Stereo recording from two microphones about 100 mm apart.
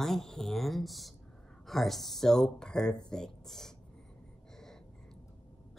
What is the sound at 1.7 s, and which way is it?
Speech, centre (ahead or behind).